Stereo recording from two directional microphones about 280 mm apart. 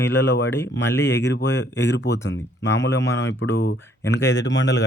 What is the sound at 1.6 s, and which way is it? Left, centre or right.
Speech, left.